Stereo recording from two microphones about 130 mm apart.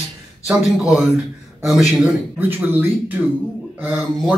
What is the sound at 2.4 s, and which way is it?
Speech, 15° right (ahead or behind).